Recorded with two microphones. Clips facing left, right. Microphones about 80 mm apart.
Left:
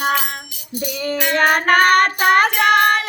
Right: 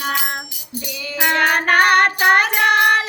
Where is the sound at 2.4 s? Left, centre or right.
Left.